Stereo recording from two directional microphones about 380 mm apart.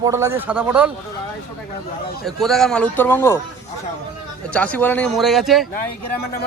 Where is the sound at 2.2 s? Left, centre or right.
Centre.